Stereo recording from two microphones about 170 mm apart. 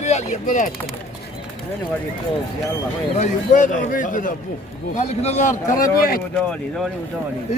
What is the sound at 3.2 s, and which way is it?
A man's voice, 45° left (ahead or behind).